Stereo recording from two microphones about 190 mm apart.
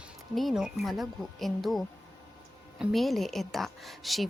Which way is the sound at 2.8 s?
Centre (ahead or behind).